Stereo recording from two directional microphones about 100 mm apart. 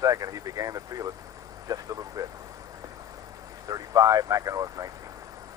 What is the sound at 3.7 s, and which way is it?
Speech, 35° right (ahead or behind).